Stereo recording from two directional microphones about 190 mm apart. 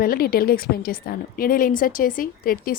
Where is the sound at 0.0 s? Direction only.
50° left (ahead or behind).